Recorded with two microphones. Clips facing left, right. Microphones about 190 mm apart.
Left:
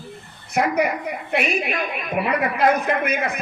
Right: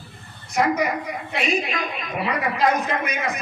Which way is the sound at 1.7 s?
60° left (ahead or behind).